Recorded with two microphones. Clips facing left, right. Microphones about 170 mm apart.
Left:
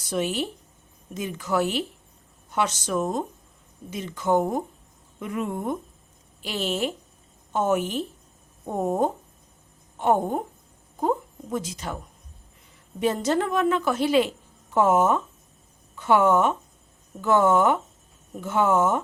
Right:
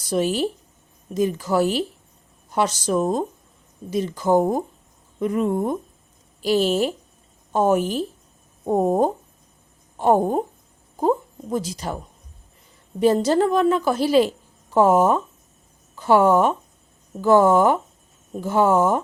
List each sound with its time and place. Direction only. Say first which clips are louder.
0.1 s a woman's voice: right 5 dB; 35° right (ahead or behind)
11.5 s a woman's voice: right 4 dB; 35° right (ahead or behind)
13.0 s a woman's voice: right 6 dB; 35° right (ahead or behind)